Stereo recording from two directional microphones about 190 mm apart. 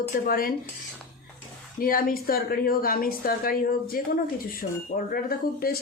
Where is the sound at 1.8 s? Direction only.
50° left (ahead or behind).